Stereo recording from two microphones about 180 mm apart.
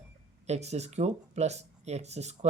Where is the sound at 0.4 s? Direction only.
35° right (ahead or behind).